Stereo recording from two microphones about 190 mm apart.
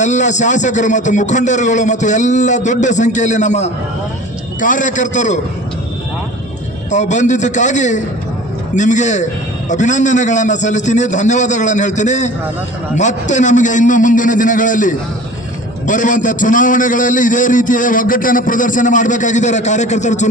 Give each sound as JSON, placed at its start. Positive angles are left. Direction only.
{"t": 0.0, "sound": "speech", "side_deg": 40}
{"t": 6.9, "sound": "a man's voice", "side_deg": 40}